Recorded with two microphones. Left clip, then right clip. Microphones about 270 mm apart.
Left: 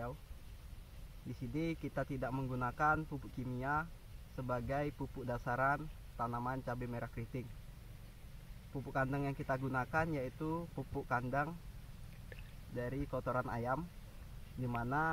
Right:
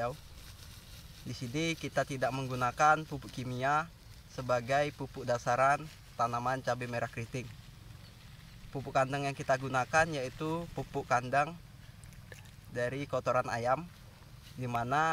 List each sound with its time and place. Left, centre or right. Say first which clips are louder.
1.5 s speech: right 7 dB; right
8.7 s speech: right 7 dB; centre
12.7 s speech: right 7 dB; centre